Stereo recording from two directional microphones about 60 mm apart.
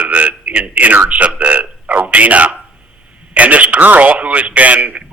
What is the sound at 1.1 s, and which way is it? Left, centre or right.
Speech, right.